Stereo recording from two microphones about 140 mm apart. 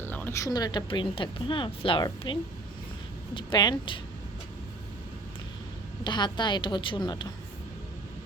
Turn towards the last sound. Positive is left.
turn(degrees=35)  # may be behind; listen again after turning